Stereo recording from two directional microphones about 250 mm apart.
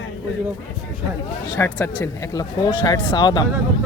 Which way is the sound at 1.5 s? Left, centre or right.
Centre.